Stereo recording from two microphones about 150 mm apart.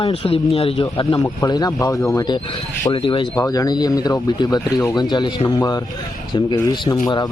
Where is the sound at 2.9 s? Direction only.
35° left (ahead or behind).